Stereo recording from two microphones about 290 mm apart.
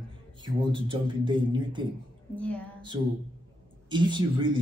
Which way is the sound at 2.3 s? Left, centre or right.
Centre.